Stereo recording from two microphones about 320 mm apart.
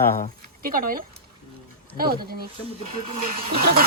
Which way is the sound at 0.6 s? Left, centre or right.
Right.